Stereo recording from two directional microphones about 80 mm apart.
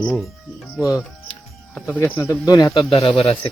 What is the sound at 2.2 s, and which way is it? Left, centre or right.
Speech, left.